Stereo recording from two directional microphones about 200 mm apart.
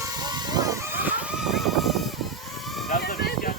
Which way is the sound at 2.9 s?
50° left (ahead or behind).